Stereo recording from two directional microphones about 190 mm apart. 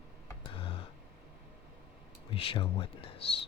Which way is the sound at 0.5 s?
30° left (ahead or behind).